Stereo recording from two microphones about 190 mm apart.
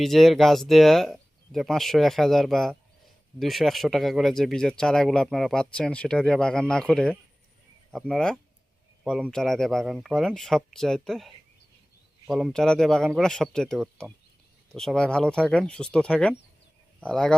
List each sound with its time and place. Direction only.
0.0 s speech: centre (ahead or behind)
12.3 s speech: centre (ahead or behind)